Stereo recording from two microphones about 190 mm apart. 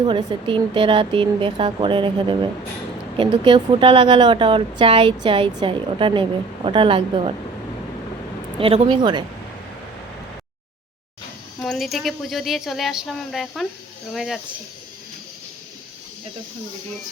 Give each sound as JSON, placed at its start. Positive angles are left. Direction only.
{"t": 0.0, "sound": "a woman's voice", "side_deg": -20}
{"t": 8.5, "sound": "a woman's voice", "side_deg": -30}
{"t": 11.6, "sound": "speech", "side_deg": 0}